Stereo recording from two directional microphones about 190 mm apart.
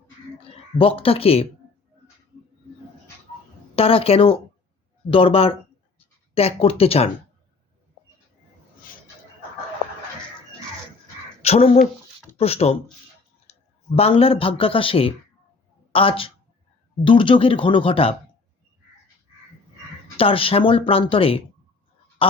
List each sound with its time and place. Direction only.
0.8 s speech: 30° left (ahead or behind)
3.8 s speech: 30° left (ahead or behind)
11.4 s a man's voice: 35° left (ahead or behind)
20.1 s speech: 30° left (ahead or behind)